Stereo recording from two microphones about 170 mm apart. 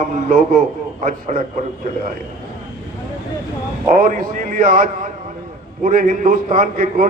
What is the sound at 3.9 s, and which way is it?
A man's voice, 55° right (ahead or behind).